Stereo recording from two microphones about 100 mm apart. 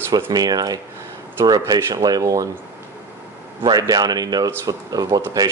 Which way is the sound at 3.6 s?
40° right (ahead or behind).